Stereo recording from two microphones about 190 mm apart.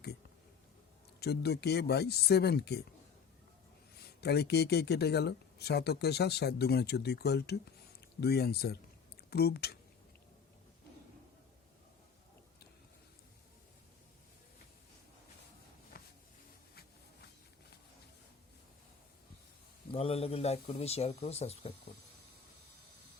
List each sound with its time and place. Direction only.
1.2 s speech: 60° left (ahead or behind)
4.0 s speech: 60° left (ahead or behind)
15.9 s a sound: 50° left (ahead or behind)
19.9 s speech: 30° left (ahead or behind)